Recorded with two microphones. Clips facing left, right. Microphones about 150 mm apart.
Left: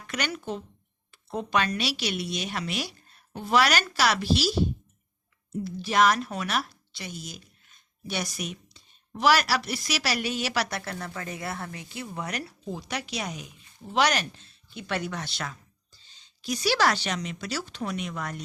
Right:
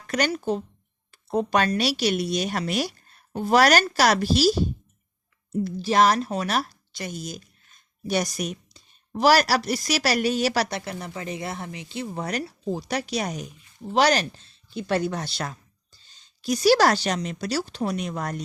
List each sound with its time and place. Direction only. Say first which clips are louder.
0.1 s speech: right 7 dB; 40° right (ahead or behind)
5.8 s speech: right 3 dB; 35° right (ahead or behind)
10.7 s speech: right 2 dB; 20° right (ahead or behind); by 13.5 s 45° right (ahead or behind)
13.9 s speech: right 4 dB; 35° right (ahead or behind)